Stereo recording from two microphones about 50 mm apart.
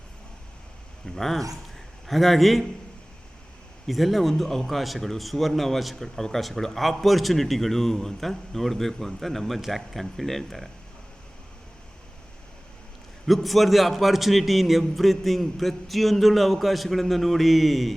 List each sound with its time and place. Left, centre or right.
1.0 s a man's voice: centre
3.8 s a man's voice: centre
13.2 s a man's voice: centre